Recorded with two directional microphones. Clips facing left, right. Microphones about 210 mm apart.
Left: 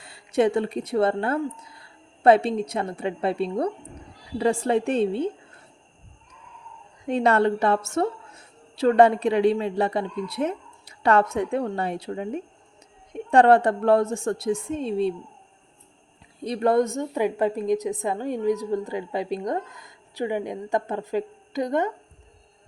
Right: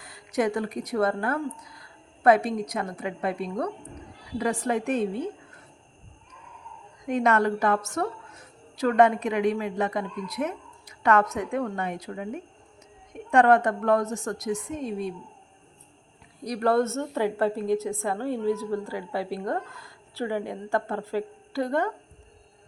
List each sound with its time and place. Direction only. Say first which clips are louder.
0.0 s a woman's voice: left 5 dB; 30° left (ahead or behind)
7.0 s a woman's voice: left 3 dB; 30° left (ahead or behind)
16.4 s a woman's voice: left 2 dB; 25° left (ahead or behind)